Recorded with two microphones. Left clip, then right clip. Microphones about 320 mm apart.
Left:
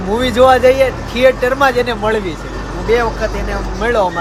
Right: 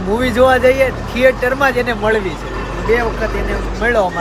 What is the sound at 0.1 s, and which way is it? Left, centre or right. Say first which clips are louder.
Speech: left 2 dB; centre.